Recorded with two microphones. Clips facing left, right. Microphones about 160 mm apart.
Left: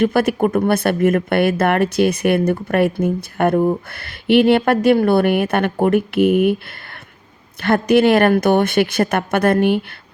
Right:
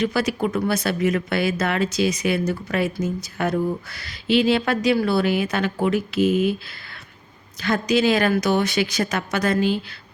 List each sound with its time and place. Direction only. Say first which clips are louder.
0.0 s speech: left 6 dB; 55° left (ahead or behind)
7.6 s speech: left 6 dB; 60° left (ahead or behind)